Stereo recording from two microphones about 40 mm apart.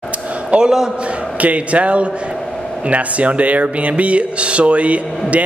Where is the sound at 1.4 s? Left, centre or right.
Right.